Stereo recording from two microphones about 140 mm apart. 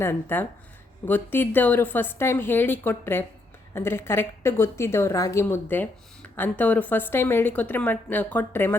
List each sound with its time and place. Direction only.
0.0 s a woman's voice: 15° left (ahead or behind)